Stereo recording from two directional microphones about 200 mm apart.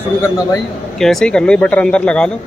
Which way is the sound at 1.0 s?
Centre (ahead or behind).